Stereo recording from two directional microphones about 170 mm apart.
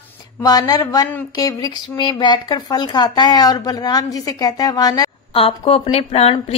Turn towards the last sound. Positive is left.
turn(degrees=35)  # may be behind; listen again after turning